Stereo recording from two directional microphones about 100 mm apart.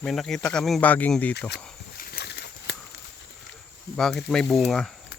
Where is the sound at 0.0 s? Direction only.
5° left (ahead or behind).